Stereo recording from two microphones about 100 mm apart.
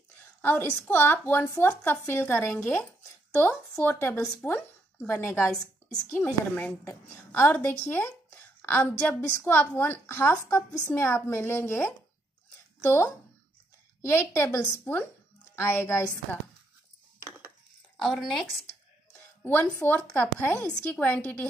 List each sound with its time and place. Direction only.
0.2 s a woman's voice: 20° left (ahead or behind)
3.8 s a woman's voice: 20° left (ahead or behind)
4.9 s a woman's voice: 25° left (ahead or behind)
5.5 s a woman's voice: 5° left (ahead or behind)
6.0 s a woman's voice: 20° left (ahead or behind)
14.9 s speech: 15° left (ahead or behind)
15.5 s a woman's voice: 25° left (ahead or behind)
18.0 s speech: centre (ahead or behind)
19.4 s speech: 15° left (ahead or behind)